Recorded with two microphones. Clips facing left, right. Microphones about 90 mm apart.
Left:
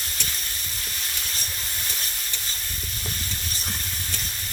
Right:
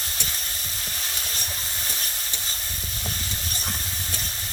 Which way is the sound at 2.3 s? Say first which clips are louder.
Even; 30° right (ahead or behind).